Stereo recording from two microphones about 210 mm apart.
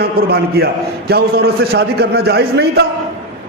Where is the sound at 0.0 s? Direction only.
50° right (ahead or behind).